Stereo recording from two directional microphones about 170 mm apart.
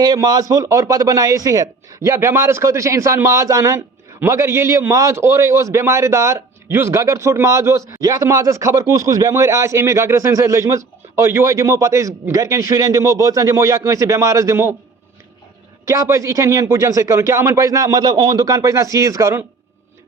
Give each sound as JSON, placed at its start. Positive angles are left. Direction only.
{"t": 0.0, "sound": "speech", "side_deg": -25}
{"t": 15.9, "sound": "speech", "side_deg": -20}